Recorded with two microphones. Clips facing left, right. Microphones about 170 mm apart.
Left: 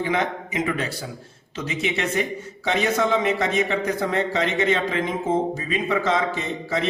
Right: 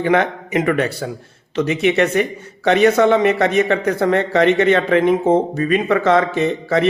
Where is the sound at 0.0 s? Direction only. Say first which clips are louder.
Right 7 dB; 65° right (ahead or behind).